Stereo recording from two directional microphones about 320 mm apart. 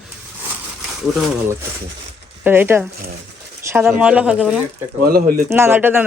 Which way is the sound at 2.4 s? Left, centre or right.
Centre.